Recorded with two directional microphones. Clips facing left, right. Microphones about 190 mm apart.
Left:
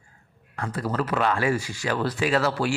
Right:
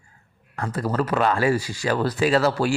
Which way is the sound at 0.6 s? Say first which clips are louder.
Right 3 dB; 40° right (ahead or behind).